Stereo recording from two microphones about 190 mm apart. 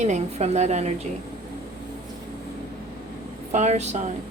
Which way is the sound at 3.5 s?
35° right (ahead or behind).